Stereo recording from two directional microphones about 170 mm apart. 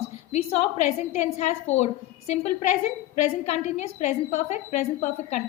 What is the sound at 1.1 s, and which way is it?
A woman's voice, 40° left (ahead or behind).